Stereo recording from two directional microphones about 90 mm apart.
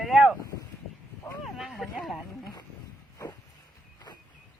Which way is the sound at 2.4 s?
45° left (ahead or behind).